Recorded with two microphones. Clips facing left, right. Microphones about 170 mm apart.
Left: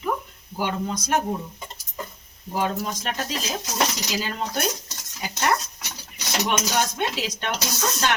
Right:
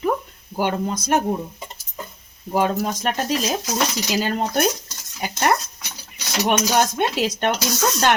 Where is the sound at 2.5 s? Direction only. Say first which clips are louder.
Right 5 dB; 55° right (ahead or behind).